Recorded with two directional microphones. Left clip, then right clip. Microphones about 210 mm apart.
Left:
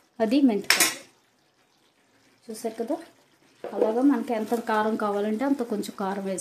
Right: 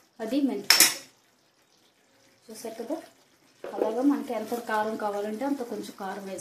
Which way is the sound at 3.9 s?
50° left (ahead or behind).